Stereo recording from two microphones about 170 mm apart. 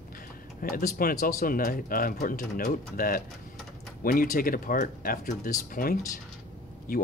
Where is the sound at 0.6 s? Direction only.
55° left (ahead or behind).